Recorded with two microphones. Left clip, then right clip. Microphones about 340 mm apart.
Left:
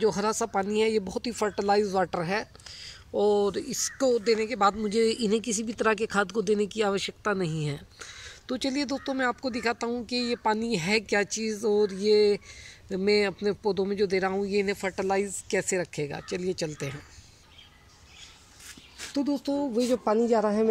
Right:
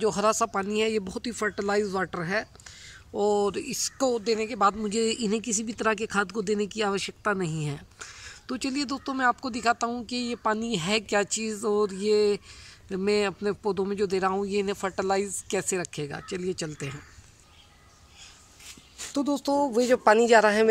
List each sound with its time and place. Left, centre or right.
0.0 s speech: centre
19.1 s a man's voice: centre